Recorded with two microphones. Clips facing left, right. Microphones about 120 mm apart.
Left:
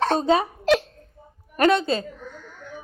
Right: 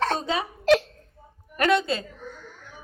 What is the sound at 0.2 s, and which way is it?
Speech, 40° left (ahead or behind).